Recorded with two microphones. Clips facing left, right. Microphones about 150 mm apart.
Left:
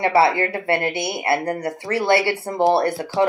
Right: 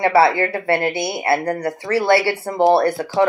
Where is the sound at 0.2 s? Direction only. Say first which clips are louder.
Right 2 dB; 25° left (ahead or behind).